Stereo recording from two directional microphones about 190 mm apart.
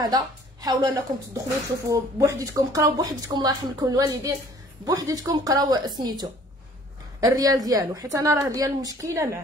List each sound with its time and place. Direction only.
0.0 s a woman's voice: 20° right (ahead or behind)